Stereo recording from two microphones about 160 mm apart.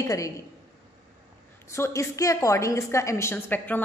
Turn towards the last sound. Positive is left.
turn(degrees=10)  # may be behind; listen again after turning